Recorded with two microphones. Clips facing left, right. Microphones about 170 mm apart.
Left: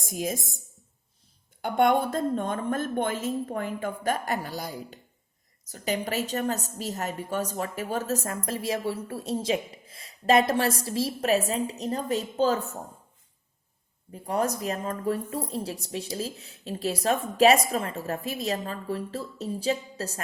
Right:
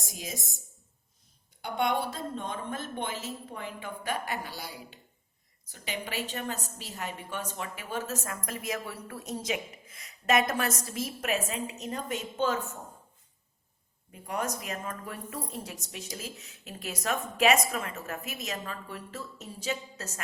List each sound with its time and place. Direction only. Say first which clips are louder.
0.0 s speech: left 9 dB; 50° left (ahead or behind)
1.6 s a woman's voice: left 7 dB; 50° left (ahead or behind)
14.1 s a woman's voice: left 6 dB; 35° left (ahead or behind)